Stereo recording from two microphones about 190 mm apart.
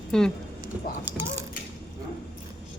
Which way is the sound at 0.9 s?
50° left (ahead or behind).